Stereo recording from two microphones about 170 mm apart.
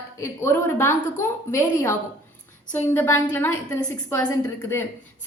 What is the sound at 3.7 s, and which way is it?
A woman's voice, 25° left (ahead or behind).